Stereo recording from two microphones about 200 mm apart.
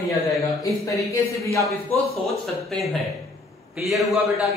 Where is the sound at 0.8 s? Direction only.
15° left (ahead or behind).